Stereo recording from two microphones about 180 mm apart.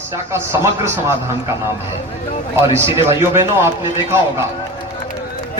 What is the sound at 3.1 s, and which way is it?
A man's voice, 15° right (ahead or behind).